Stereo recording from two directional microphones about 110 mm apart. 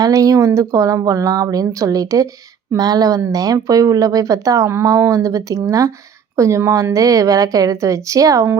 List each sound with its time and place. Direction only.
0.0 s a woman's voice: 30° right (ahead or behind)